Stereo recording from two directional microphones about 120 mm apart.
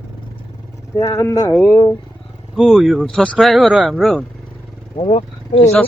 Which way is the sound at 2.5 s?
Centre (ahead or behind).